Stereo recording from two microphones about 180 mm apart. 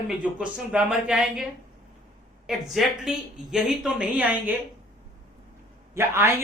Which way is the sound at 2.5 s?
Centre (ahead or behind).